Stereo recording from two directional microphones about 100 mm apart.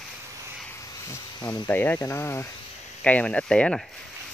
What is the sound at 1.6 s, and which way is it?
Speech, 20° left (ahead or behind).